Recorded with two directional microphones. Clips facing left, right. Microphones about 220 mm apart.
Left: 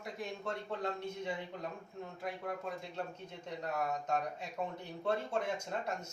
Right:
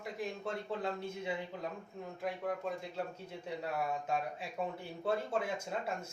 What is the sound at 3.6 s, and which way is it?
Speech, 5° right (ahead or behind).